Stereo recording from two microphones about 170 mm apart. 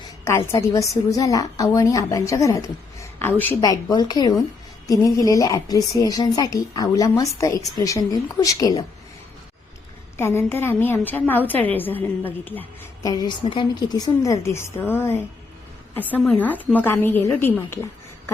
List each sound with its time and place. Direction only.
0.3 s a woman's voice: 15° left (ahead or behind)
10.2 s a woman's voice: 15° left (ahead or behind)